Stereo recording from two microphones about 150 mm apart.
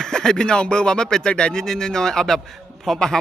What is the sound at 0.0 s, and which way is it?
Speech, 5° left (ahead or behind).